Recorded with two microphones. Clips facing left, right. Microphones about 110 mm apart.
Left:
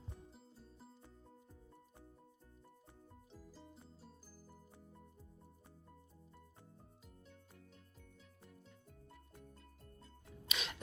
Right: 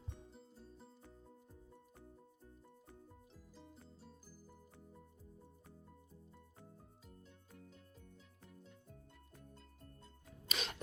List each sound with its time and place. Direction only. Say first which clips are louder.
0.3 s music: right 2 dB; centre (ahead or behind)
3.3 s music: left 4 dB; centre (ahead or behind)
10.4 s music: right 1 dB; 35° right (ahead or behind)